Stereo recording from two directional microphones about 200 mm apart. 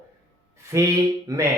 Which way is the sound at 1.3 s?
20° right (ahead or behind).